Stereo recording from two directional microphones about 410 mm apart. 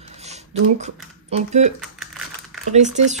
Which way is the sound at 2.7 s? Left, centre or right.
Centre.